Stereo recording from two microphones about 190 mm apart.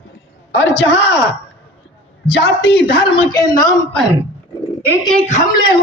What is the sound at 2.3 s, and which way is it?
Speech, 60° left (ahead or behind).